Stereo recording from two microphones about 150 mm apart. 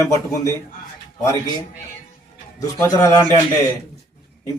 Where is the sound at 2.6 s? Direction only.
20° left (ahead or behind).